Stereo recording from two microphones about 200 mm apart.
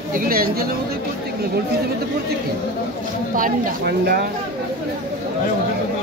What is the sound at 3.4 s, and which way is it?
Speech, 50° right (ahead or behind).